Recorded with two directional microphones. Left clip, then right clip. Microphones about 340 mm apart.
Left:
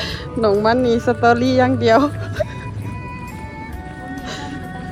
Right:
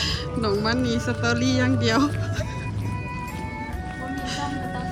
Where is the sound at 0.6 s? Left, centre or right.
Centre.